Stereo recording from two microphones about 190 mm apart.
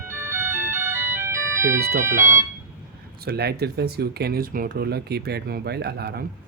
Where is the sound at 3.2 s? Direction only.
55° right (ahead or behind).